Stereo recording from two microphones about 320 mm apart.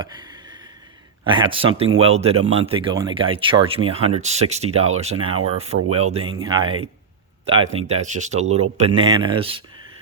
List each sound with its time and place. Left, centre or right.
1.2 s speech: centre